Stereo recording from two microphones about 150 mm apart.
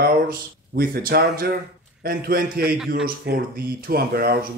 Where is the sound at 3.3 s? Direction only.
90° right.